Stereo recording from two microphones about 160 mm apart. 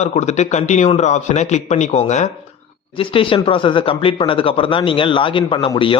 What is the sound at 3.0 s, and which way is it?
Speech, 35° left (ahead or behind).